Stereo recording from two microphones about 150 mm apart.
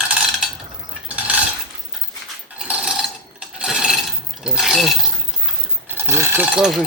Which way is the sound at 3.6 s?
5° right (ahead or behind).